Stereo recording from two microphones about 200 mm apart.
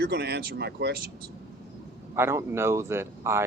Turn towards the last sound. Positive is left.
turn(degrees=-10)  # may be behind; listen again after turning